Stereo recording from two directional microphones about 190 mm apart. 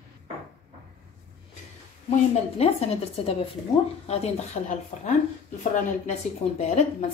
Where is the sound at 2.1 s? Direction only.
35° left (ahead or behind).